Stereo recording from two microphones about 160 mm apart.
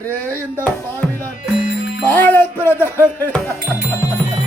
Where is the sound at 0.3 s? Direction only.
10° left (ahead or behind).